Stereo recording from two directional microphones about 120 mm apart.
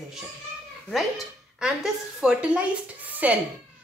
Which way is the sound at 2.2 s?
10° right (ahead or behind).